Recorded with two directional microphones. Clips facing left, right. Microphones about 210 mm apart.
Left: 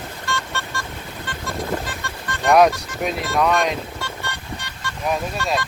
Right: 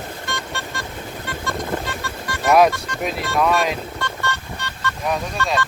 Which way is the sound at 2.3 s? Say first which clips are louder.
Even; 5° right (ahead or behind).